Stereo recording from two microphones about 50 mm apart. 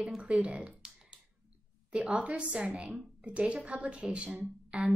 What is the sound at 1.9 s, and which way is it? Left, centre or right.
A woman's voice, right.